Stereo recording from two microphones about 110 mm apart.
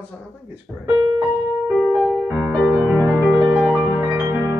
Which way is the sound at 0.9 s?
15° right (ahead or behind).